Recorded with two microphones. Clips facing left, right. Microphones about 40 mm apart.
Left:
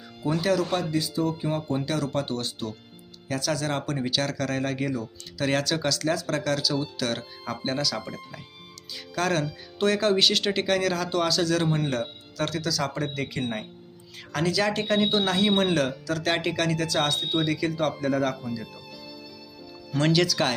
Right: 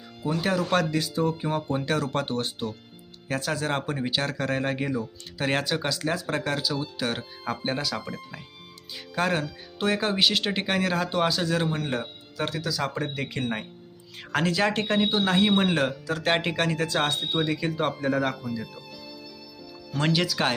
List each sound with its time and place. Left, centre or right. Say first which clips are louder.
0.2 s speech: left 1 dB; centre
0.8 s speech: right 1 dB; right
1.2 s speech: right 3 dB; right
1.8 s speech: right 1 dB; right
7.9 s speech: even; centre
9.1 s speech: even; centre
11.6 s speech: left 2 dB; centre
11.9 s speech: left 1 dB; centre
20.0 s speech: left 2 dB; centre